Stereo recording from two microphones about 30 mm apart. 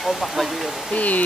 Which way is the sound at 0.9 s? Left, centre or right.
Left.